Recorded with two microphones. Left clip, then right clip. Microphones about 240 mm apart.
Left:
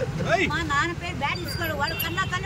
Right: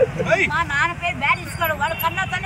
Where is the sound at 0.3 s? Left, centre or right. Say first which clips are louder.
Right 5 dB; centre.